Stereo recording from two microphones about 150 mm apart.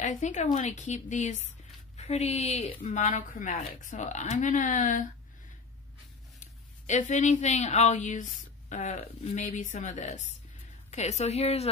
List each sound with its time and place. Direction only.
0.0 s speech: 55° left (ahead or behind)
6.4 s speech: 55° left (ahead or behind)